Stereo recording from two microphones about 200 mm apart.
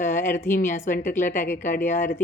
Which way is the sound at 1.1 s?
40° left (ahead or behind).